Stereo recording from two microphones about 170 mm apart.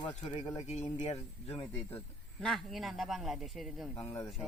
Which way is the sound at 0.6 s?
40° left (ahead or behind).